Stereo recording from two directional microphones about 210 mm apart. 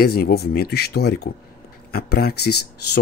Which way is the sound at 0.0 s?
50° left (ahead or behind).